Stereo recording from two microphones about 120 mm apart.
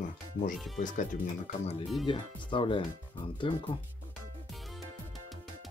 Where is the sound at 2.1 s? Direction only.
45° left (ahead or behind).